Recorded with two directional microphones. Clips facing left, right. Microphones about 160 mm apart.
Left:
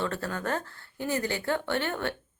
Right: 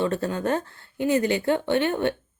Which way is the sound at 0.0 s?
20° right (ahead or behind).